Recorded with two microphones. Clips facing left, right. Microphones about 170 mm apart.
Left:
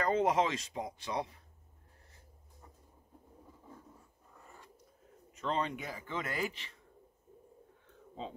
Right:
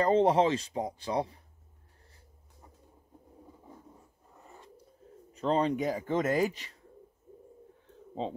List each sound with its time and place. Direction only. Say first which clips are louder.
0.0 s speech: right 6 dB; 30° right (ahead or behind)
5.3 s speech: right 7 dB; 35° right (ahead or behind)